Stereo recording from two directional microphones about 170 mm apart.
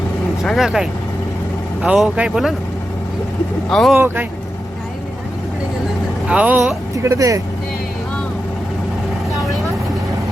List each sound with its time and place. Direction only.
0.4 s speech: centre (ahead or behind)
3.7 s speech: 5° left (ahead or behind)
3.9 s speech: 10° right (ahead or behind)
6.2 s speech: 10° right (ahead or behind)
6.9 s speech: 20° right (ahead or behind)